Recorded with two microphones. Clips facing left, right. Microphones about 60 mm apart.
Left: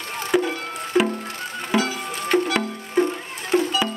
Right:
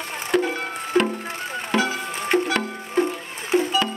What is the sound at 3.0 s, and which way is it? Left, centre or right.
Music, centre.